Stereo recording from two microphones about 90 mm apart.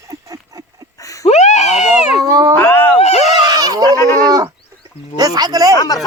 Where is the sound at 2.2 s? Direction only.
40° right (ahead or behind).